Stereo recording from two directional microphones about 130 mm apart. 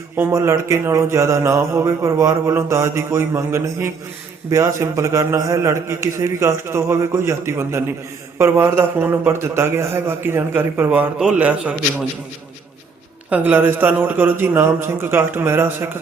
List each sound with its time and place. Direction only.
0.2 s mantra: 20° right (ahead or behind)
8.4 s a man's voice: 20° right (ahead or behind)
13.3 s a man's voice: 15° right (ahead or behind)